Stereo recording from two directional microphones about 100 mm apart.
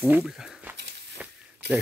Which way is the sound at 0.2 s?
5° right (ahead or behind).